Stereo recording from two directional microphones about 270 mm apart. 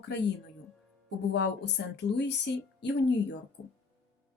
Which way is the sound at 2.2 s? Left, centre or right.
Left.